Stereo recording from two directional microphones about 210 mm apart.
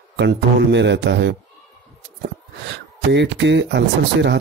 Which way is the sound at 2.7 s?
55° right (ahead or behind).